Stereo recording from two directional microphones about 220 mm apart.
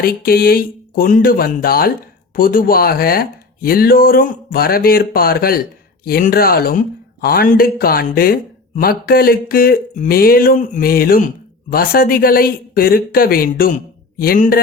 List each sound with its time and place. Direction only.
0.0 s speech: 45° left (ahead or behind)